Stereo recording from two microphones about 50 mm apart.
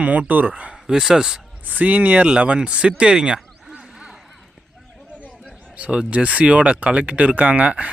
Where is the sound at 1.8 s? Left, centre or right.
Right.